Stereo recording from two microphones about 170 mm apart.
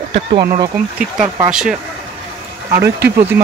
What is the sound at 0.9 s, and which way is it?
Speech, 5° right (ahead or behind).